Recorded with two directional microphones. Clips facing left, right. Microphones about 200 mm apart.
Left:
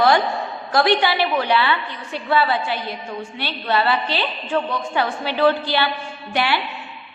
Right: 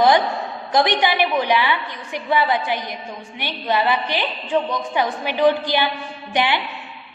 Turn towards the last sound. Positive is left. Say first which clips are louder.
# right 1 dB
turn(degrees=-20)  # may be behind; listen again after turning